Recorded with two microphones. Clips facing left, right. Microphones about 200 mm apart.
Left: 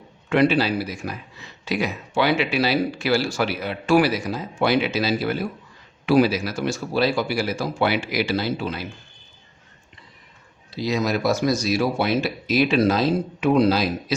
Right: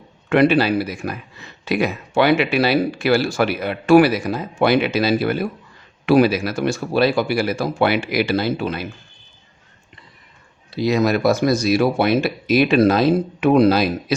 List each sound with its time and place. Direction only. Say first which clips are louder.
0.3 s speech: right 4 dB; 60° right (ahead or behind)
10.7 s speech: right 5 dB; 60° right (ahead or behind)